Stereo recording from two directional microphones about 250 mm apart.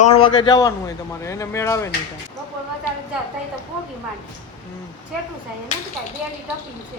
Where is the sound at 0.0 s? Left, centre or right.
Left.